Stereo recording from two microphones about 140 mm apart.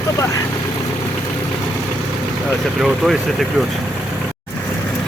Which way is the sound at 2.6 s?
Centre (ahead or behind).